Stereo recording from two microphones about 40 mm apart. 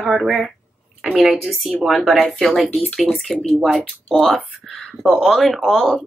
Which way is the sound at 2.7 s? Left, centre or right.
Left.